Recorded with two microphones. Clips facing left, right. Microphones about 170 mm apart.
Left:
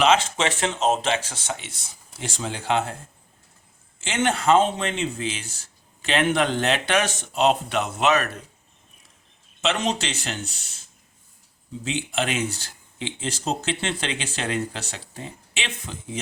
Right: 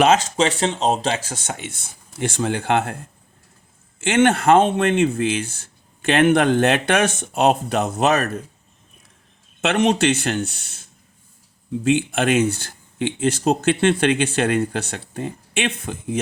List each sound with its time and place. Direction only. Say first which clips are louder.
0.0 s a man's voice: right 4 dB; 40° right (ahead or behind)
4.0 s a man's voice: right 6 dB; 55° right (ahead or behind); by 8.3 s 40° right (ahead or behind)
9.6 s speech: right 7 dB; 60° right (ahead or behind)